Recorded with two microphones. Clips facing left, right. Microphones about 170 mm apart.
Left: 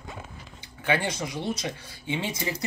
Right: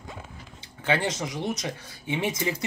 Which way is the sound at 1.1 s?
20° right (ahead or behind).